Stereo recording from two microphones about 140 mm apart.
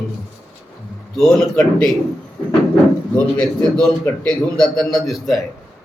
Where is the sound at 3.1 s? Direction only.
5° left (ahead or behind).